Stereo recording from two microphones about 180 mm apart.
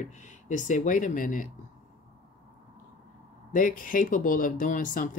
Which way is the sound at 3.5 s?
45° left (ahead or behind).